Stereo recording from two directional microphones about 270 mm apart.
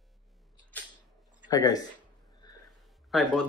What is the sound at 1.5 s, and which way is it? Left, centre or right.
Speech, centre.